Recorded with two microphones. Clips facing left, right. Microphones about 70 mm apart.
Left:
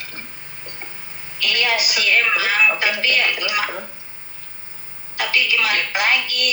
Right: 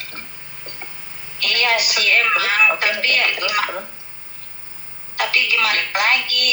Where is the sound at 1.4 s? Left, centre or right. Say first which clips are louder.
Right 1 dB; right.